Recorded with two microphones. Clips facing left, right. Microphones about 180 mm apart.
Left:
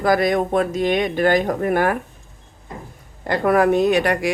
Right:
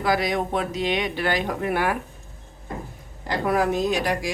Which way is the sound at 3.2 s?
55° left (ahead or behind).